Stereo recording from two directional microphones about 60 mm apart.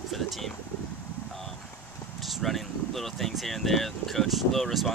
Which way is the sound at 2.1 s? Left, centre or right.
Centre.